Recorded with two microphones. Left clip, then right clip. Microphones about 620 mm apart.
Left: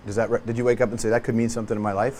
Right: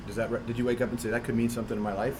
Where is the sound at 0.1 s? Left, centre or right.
Left.